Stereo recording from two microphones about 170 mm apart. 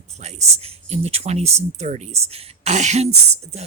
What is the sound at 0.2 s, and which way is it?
Speech, 40° right (ahead or behind).